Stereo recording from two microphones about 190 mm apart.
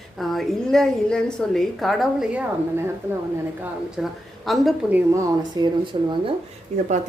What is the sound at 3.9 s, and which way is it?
A woman's voice, centre (ahead or behind).